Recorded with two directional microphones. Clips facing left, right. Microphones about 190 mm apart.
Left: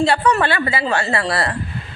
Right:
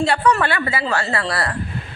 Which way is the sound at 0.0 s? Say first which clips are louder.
Left 1 dB; 30° left (ahead or behind).